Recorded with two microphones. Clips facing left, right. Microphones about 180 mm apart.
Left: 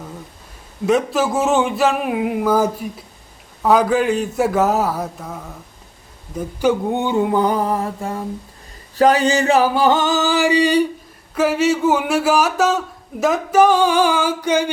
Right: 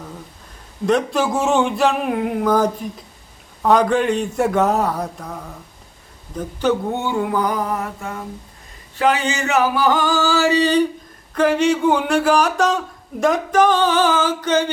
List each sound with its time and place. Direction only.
0.9 s speech: 5° left (ahead or behind)
6.3 s singing: 10° left (ahead or behind)
11.3 s speech: 5° left (ahead or behind)